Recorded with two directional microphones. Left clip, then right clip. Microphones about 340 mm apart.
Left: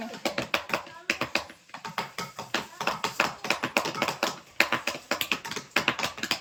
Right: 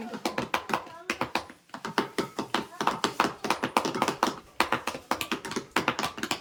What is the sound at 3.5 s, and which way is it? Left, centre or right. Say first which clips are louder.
Tap: even; centre.